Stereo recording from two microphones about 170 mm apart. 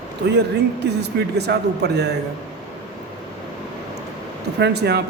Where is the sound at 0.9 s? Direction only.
75° right (ahead or behind).